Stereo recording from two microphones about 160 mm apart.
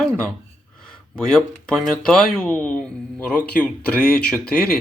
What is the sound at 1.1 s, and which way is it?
Speech, 5° left (ahead or behind).